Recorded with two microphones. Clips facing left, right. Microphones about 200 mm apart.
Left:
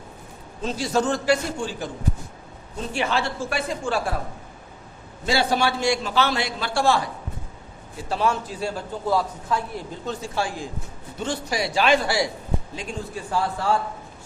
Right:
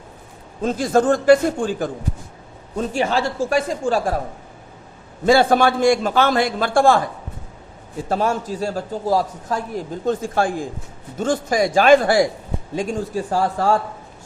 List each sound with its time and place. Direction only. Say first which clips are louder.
0.6 s a man's voice: right 6 dB; 50° right (ahead or behind)
5.2 s a man's voice: right 8 dB; 50° right (ahead or behind)